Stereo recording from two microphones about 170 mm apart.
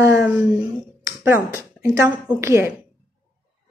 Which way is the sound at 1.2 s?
15° right (ahead or behind).